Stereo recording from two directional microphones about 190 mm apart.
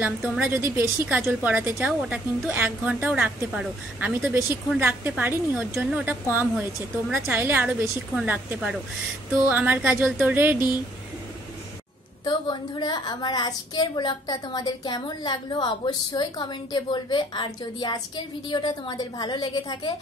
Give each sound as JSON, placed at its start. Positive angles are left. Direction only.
{"t": 0.0, "sound": "a woman's voice", "side_deg": -5}
{"t": 12.3, "sound": "a woman's voice", "side_deg": 20}